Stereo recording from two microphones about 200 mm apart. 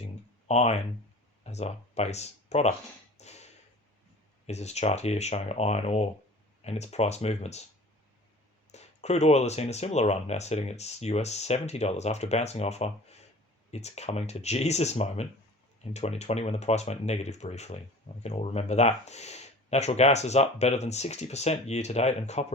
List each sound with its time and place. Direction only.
0.0 s a sound: 35° left (ahead or behind)
1.5 s speech: 35° left (ahead or behind)
3.2 s tap: 35° left (ahead or behind)
4.4 s speech: 35° left (ahead or behind)
8.7 s speech: 35° left (ahead or behind)